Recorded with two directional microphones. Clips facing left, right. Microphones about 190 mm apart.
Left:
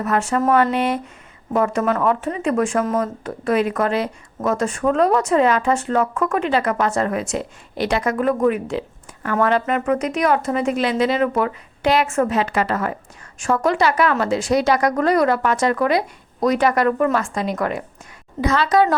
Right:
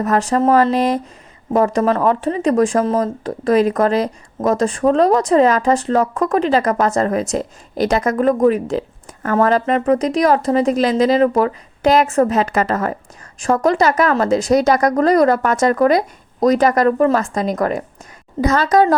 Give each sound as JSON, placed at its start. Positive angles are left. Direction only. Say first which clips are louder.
{"t": 0.0, "sound": "a woman's voice", "louder": "right 4 dB", "side_deg": -35}